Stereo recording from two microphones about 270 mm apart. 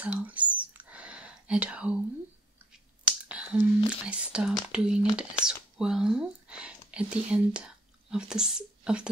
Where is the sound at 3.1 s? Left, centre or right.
Centre.